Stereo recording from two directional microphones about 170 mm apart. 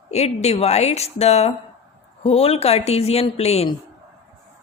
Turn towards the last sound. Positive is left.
turn(degrees=40)  # may be behind; listen again after turning